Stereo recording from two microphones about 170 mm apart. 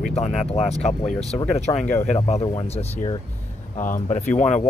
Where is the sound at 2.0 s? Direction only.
40° left (ahead or behind).